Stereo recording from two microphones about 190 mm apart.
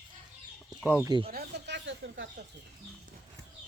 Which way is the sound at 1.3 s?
60° right (ahead or behind).